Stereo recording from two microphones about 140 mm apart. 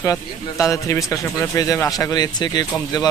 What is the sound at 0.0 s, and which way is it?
Speech, 25° left (ahead or behind).